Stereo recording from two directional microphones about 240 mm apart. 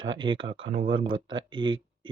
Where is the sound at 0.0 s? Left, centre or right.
Centre.